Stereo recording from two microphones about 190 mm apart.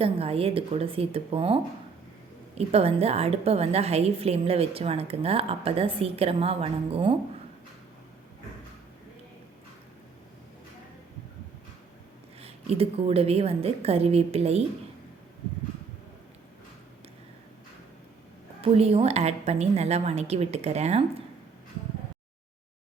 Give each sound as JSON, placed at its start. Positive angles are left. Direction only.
{"t": 0.0, "sound": "a woman's voice", "side_deg": -30}
{"t": 2.6, "sound": "a woman's voice", "side_deg": -30}
{"t": 12.4, "sound": "a woman's voice", "side_deg": -30}
{"t": 18.6, "sound": "a woman's voice", "side_deg": -30}